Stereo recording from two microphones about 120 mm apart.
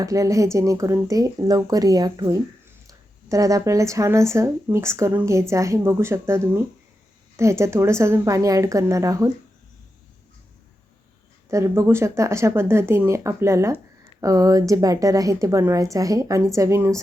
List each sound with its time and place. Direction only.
0.0 s speech: 25° right (ahead or behind)
11.4 s speech: 25° right (ahead or behind)